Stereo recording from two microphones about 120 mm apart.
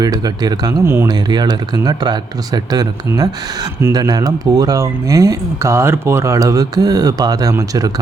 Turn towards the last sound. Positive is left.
turn(degrees=-30)  # may be behind; listen again after turning